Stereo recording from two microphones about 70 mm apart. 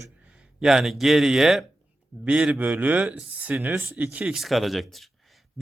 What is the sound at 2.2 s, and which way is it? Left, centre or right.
A man's voice, centre.